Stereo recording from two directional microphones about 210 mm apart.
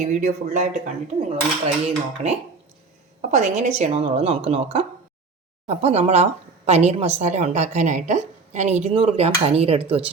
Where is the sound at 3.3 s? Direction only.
35° right (ahead or behind).